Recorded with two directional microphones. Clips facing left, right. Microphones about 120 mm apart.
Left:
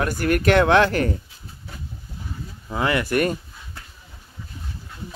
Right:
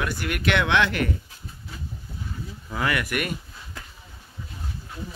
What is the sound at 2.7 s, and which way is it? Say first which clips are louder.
Speech: left 4 dB; 25° left (ahead or behind).